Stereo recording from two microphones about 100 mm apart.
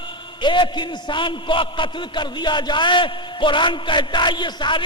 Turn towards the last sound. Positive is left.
turn(degrees=50)  # may be behind; listen again after turning